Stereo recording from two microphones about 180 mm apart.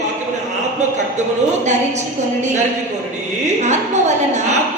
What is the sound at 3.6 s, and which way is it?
Speech, 40° right (ahead or behind).